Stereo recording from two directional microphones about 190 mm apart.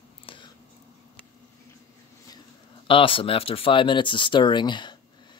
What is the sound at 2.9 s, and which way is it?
Speech, 30° left (ahead or behind).